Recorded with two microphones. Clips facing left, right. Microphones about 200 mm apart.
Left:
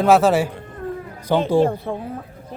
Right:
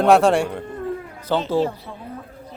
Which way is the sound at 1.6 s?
50° left (ahead or behind).